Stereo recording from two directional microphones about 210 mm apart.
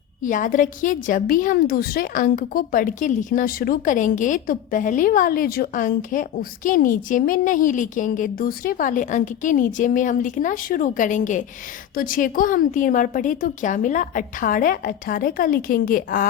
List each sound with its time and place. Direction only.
0.2 s a woman's voice: 35° left (ahead or behind)